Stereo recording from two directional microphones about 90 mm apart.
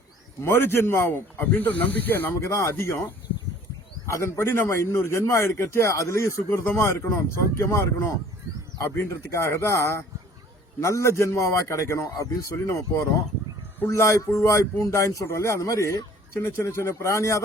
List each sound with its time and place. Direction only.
0.4 s speech: 25° left (ahead or behind)
4.0 s speech: 30° left (ahead or behind)